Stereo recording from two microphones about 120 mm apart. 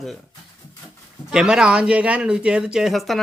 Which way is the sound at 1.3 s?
5° right (ahead or behind).